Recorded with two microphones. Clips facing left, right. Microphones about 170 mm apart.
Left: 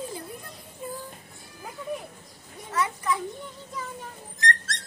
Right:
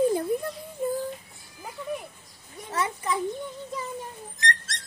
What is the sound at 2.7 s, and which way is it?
Speech, 25° right (ahead or behind).